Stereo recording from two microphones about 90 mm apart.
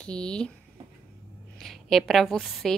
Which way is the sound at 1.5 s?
5° left (ahead or behind).